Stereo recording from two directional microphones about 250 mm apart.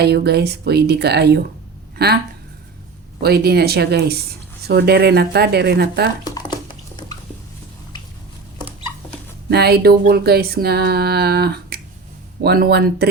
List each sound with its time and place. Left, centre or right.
0.0 s speech: right
3.2 s speech: right
9.5 s speech: right